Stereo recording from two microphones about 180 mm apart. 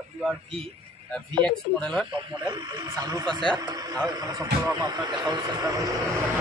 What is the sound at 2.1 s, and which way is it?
Speech, 25° right (ahead or behind).